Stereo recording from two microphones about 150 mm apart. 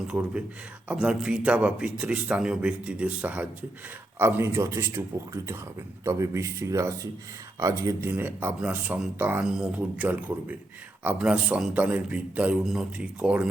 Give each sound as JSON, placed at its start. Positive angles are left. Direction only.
{"t": 0.1, "sound": "speech", "side_deg": -10}